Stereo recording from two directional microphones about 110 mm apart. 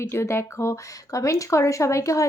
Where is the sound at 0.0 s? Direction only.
25° left (ahead or behind).